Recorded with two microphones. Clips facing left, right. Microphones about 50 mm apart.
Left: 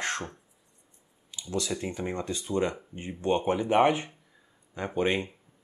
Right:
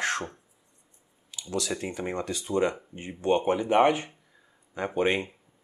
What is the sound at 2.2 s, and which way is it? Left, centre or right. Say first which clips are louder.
Speech: right 1 dB; centre.